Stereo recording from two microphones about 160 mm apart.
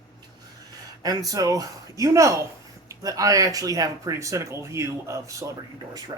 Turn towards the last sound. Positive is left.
turn(degrees=-20)  # may be behind; listen again after turning